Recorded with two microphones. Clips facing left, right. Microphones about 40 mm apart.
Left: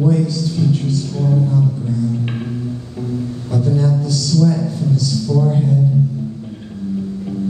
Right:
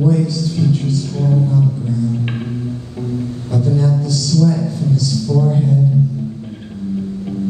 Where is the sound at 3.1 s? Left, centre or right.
Centre.